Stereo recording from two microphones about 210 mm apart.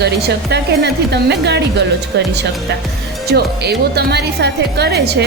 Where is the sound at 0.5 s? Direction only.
55° right (ahead or behind).